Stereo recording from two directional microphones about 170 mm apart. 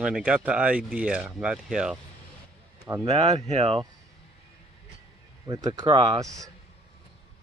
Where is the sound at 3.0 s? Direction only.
35° right (ahead or behind).